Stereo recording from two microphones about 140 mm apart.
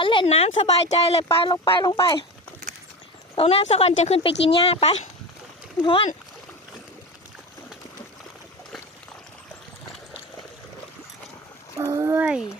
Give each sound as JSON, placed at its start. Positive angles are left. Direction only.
{"t": 0.0, "sound": "a sound", "side_deg": 35}
{"t": 0.3, "sound": "speech", "side_deg": 45}
{"t": 3.3, "sound": "speech", "side_deg": 45}
{"t": 11.8, "sound": "speech", "side_deg": -20}